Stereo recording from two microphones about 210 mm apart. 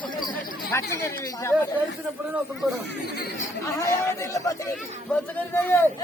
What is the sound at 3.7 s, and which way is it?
Speech, 15° left (ahead or behind).